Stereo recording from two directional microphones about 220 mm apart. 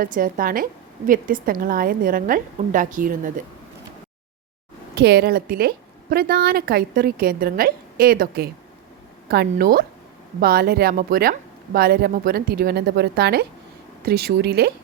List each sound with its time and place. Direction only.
0.0 s a woman's voice: 40° right (ahead or behind)
4.9 s a woman's voice: 45° right (ahead or behind)